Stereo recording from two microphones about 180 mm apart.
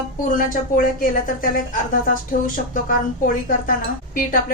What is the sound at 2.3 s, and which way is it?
A woman's voice, 50° left (ahead or behind).